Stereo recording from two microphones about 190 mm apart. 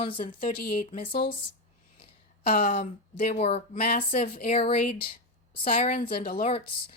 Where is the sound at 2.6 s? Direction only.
30° left (ahead or behind).